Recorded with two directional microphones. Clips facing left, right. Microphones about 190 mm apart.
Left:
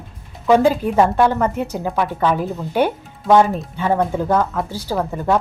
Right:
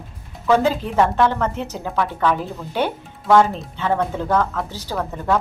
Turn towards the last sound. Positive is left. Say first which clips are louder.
# left 3 dB
turn(degrees=15)  # may be behind; listen again after turning